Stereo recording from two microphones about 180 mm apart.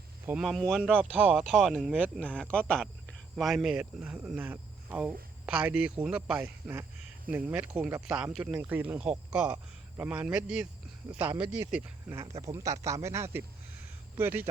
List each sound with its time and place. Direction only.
0.3 s speech: 5° right (ahead or behind)
2.4 s speech: 5° left (ahead or behind); by 14.5 s 10° right (ahead or behind)